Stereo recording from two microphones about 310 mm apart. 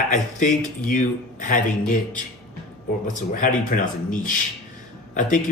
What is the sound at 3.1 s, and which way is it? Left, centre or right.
Speech, left.